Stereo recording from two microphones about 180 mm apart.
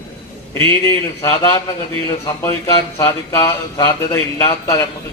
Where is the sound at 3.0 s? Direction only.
15° left (ahead or behind).